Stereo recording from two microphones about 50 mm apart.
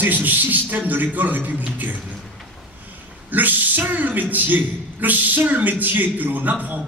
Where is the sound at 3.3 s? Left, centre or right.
Right.